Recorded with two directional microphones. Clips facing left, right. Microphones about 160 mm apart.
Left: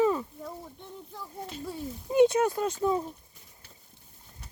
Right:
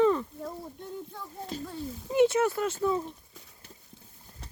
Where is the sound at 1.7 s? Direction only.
20° left (ahead or behind).